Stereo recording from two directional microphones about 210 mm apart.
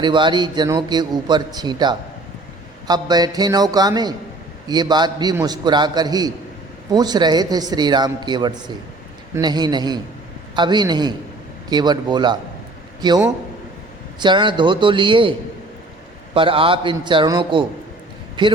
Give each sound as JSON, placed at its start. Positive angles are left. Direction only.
{"t": 0.0, "sound": "a man's voice", "side_deg": -20}